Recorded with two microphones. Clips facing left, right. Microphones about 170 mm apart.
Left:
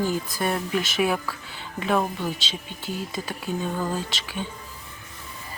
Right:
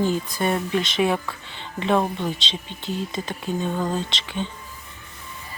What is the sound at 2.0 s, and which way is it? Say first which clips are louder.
Speech: right 2 dB; 20° right (ahead or behind).